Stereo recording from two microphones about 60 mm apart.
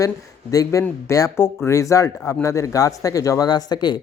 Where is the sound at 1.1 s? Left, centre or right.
Left.